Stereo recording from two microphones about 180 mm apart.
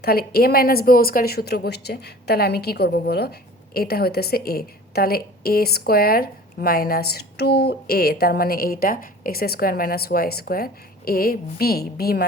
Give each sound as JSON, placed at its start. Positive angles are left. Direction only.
{"t": 0.0, "sound": "a woman's voice", "side_deg": 55}